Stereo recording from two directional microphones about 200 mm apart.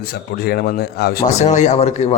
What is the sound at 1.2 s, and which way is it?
Speech, 35° left (ahead or behind).